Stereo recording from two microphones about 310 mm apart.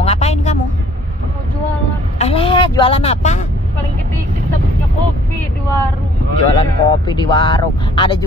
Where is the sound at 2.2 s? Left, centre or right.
Centre.